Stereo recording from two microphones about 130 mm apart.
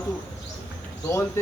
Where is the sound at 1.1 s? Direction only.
20° left (ahead or behind).